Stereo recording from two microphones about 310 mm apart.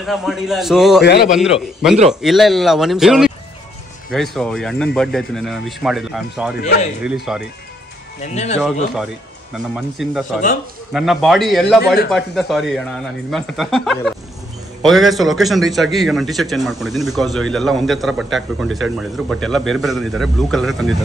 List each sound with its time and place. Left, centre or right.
0.0 s a man's voice: centre
1.0 s a man's voice: left
1.4 s a man's voice: centre
6.6 s speech: left
7.0 s a man's voice: centre
8.2 s speech: left
9.8 s a man's voice: centre